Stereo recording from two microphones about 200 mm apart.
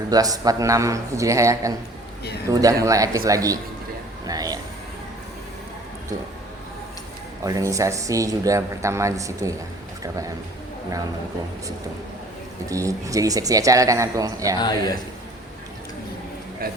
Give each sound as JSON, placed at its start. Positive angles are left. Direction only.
{"t": 0.1, "sound": "speech", "side_deg": -20}
{"t": 7.4, "sound": "speech", "side_deg": -15}
{"t": 12.6, "sound": "speech", "side_deg": -15}
{"t": 14.6, "sound": "speech", "side_deg": 20}